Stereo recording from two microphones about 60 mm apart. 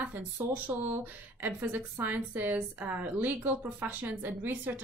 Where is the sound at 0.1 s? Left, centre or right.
Right.